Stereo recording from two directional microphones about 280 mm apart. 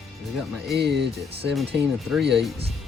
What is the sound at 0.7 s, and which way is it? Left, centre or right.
Speech, right.